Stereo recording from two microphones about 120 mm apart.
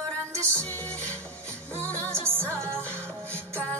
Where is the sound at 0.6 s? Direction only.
10° left (ahead or behind).